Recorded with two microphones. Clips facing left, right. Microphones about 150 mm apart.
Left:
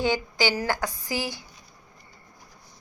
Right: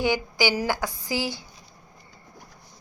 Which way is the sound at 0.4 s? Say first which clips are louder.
Right 1 dB; 10° right (ahead or behind).